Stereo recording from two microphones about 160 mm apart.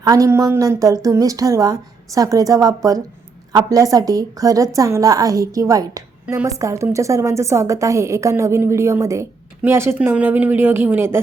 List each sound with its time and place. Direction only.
0.0 s a woman's voice: 20° right (ahead or behind)